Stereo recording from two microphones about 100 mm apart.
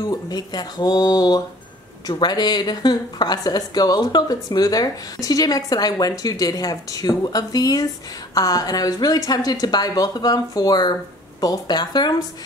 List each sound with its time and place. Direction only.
0.1 s speech: 40° left (ahead or behind)